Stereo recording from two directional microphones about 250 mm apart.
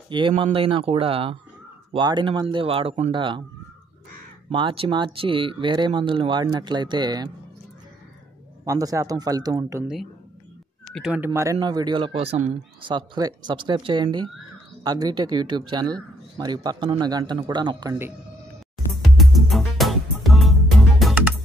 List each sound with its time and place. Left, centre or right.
0.1 s speech: centre
4.5 s speech: centre
8.6 s speech: centre
11.0 s speech: centre
18.9 s music: centre